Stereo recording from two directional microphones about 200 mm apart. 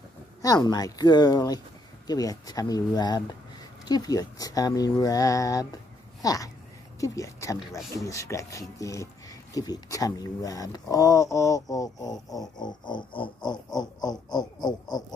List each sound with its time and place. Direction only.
0.4 s speech: 20° left (ahead or behind)